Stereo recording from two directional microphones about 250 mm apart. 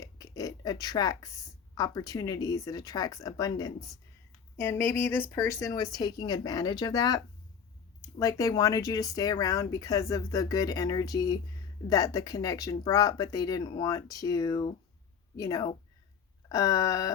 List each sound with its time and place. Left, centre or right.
0.0 s a sound: centre
1.7 s speech: centre
8.2 s speech: centre